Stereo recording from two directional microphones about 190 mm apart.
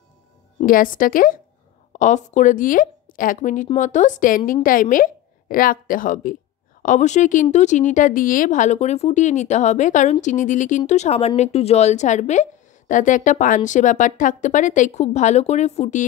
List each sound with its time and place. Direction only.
0.7 s a woman's voice: 45° left (ahead or behind)